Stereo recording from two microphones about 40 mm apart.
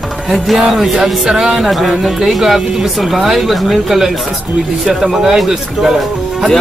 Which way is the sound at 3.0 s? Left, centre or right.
Centre.